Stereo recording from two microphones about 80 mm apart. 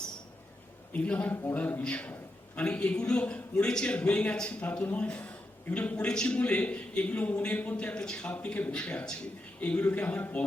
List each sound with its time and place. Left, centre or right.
1.0 s a man's voice: centre